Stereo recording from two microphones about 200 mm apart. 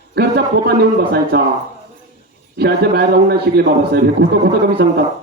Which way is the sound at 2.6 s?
50° right (ahead or behind).